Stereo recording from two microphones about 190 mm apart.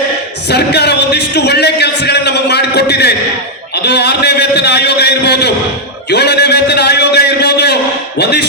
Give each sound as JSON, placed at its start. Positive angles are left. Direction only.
{"t": 0.5, "sound": "a man's voice", "side_deg": 60}
{"t": 3.8, "sound": "a sound", "side_deg": 60}
{"t": 6.1, "sound": "a man's voice", "side_deg": 60}